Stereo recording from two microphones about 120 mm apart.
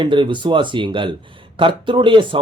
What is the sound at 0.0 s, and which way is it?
Speech, 40° right (ahead or behind).